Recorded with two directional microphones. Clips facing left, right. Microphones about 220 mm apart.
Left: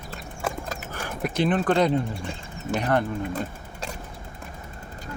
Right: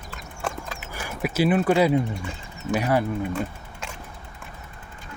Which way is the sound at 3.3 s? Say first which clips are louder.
Right 1 dB; 35° left (ahead or behind).